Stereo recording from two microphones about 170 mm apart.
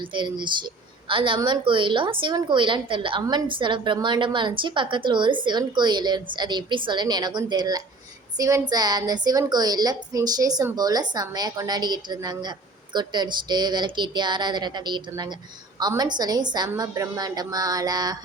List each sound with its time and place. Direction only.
0.1 s a woman's voice: 30° right (ahead or behind)